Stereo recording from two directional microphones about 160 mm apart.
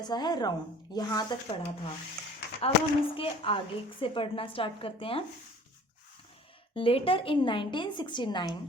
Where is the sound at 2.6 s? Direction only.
35° left (ahead or behind).